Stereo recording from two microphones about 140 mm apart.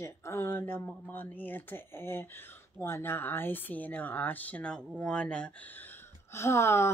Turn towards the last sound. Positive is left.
turn(degrees=20)  # may be behind; listen again after turning